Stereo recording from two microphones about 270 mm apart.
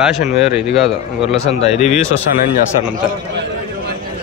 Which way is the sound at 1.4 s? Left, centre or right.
Left.